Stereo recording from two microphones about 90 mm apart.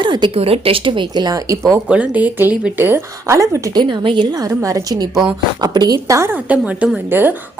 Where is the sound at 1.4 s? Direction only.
40° right (ahead or behind).